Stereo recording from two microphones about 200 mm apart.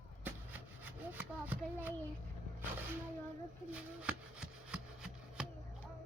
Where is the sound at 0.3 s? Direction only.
10° right (ahead or behind).